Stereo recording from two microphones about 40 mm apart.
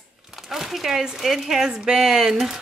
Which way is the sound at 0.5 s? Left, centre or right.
Centre.